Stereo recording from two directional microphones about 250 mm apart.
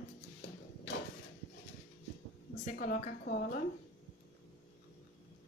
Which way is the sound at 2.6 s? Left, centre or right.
Left.